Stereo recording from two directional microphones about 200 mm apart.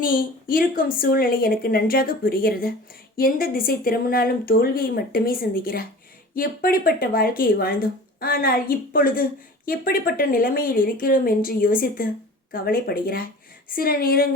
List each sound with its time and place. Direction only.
0.0 s speech: 45° left (ahead or behind)